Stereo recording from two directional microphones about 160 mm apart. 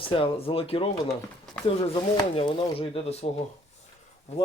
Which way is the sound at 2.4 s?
30° left (ahead or behind).